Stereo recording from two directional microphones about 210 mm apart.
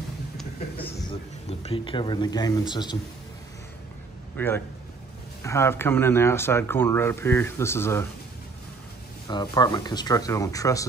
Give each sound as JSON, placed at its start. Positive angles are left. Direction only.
{"t": 1.5, "sound": "speech", "side_deg": 30}
{"t": 4.4, "sound": "speech", "side_deg": 10}
{"t": 9.3, "sound": "speech", "side_deg": 20}